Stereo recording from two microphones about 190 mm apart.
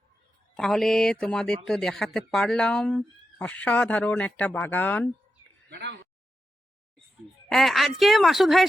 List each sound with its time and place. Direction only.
0.5 s speech: centre (ahead or behind)
5.6 s speech: 60° right (ahead or behind)
7.5 s speech: centre (ahead or behind)